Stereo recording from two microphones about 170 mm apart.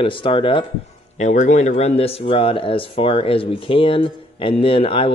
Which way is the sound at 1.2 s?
45° left (ahead or behind).